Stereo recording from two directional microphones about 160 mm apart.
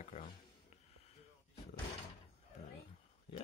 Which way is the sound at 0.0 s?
35° left (ahead or behind).